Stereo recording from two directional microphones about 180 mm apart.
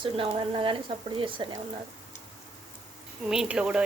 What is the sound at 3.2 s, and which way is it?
Speech, 5° right (ahead or behind).